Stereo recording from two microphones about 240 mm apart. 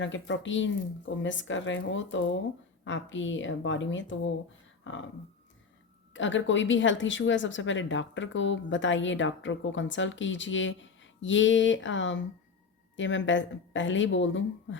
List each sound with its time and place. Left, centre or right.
0.0 s a woman's voice: left
4.8 s a sound: left
6.1 s a woman's voice: left